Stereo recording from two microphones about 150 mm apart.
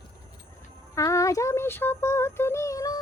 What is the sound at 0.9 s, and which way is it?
Child singing, 20° left (ahead or behind).